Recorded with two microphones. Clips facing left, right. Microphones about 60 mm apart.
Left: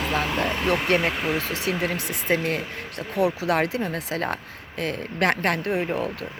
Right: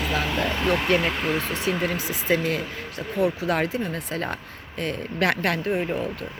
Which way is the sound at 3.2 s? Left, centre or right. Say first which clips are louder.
Left 1 dB; left.